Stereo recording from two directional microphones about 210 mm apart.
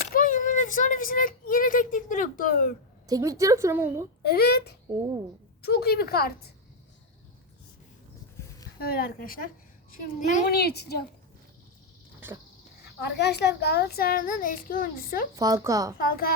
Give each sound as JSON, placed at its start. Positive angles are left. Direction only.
{"t": 0.1, "sound": "a sound", "side_deg": 40}
{"t": 3.1, "sound": "a woman's voice", "side_deg": -15}
{"t": 4.2, "sound": "a child's voice", "side_deg": 50}
{"t": 8.8, "sound": "a child's voice", "side_deg": 45}
{"t": 13.0, "sound": "a child's voice", "side_deg": 50}
{"t": 15.4, "sound": "a woman's voice", "side_deg": -15}
{"t": 16.0, "sound": "a child's voice", "side_deg": 45}